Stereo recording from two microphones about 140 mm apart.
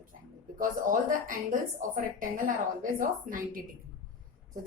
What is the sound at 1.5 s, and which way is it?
A woman's voice, 80° right.